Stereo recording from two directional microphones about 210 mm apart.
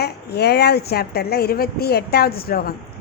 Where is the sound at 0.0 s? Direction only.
50° left (ahead or behind).